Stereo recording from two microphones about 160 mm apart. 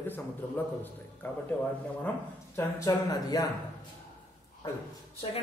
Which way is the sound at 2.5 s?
20° left (ahead or behind).